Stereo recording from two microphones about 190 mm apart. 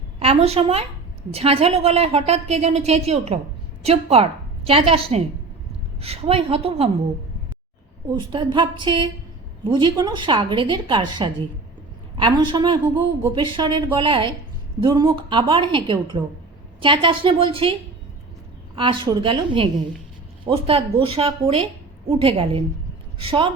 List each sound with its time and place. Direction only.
0.2 s a woman's voice: 30° right (ahead or behind)
8.1 s a woman's voice: 25° right (ahead or behind)
18.8 s a woman's voice: 25° right (ahead or behind)